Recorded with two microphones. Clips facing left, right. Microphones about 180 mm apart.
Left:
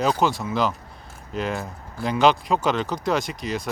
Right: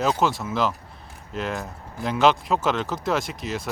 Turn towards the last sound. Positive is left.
turn(degrees=0)  # may be behind; listen again after turning